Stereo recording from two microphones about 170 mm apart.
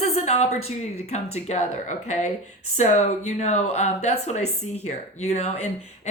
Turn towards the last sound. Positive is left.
turn(degrees=40)  # may be behind; listen again after turning